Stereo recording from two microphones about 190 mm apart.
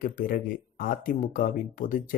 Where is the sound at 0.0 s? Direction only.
50° left (ahead or behind).